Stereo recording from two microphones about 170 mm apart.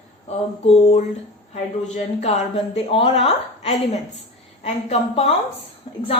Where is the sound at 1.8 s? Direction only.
40° left (ahead or behind).